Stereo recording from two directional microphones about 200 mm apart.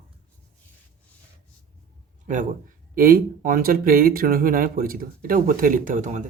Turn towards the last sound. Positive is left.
turn(degrees=-40)  # may be behind; listen again after turning